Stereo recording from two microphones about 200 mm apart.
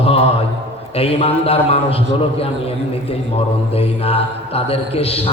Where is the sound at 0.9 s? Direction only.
30° left (ahead or behind).